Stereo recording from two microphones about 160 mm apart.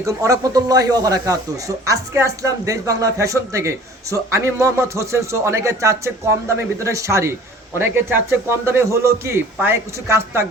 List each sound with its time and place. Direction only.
0.0 s a man's voice: 20° right (ahead or behind)